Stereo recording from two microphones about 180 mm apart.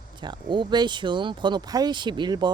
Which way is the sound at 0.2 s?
25° right (ahead or behind).